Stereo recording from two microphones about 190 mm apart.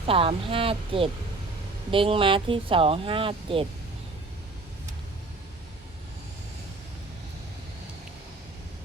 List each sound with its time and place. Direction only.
0.1 s speech: 30° right (ahead or behind)